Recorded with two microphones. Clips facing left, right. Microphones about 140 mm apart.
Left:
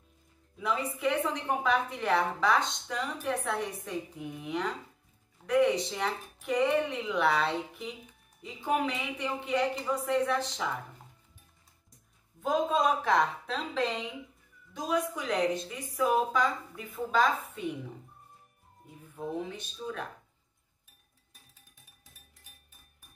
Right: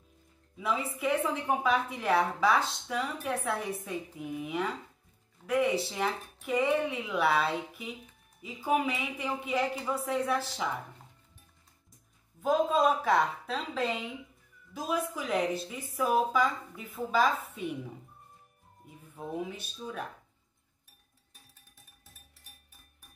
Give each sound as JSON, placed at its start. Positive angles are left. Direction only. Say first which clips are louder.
{"t": 0.6, "sound": "speech", "louder": "even", "side_deg": -5}
{"t": 12.4, "sound": "speech", "louder": "right 2 dB", "side_deg": 0}
{"t": 19.1, "sound": "speech", "louder": "left 1 dB", "side_deg": -5}